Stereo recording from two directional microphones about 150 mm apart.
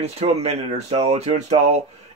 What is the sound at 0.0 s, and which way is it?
Speech, 45° right (ahead or behind).